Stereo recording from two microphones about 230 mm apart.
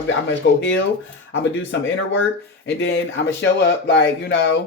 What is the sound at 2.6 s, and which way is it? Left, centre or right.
Speech, left.